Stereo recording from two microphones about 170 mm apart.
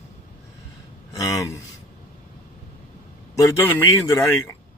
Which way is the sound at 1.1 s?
20° left (ahead or behind).